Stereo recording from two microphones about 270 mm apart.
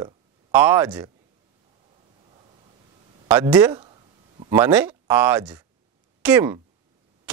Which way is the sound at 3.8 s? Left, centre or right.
Centre.